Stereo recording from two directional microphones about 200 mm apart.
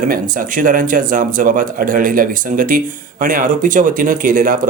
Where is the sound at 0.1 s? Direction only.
40° right (ahead or behind).